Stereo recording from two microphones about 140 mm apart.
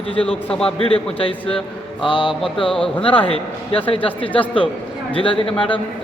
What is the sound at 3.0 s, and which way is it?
Speech, 40° left (ahead or behind).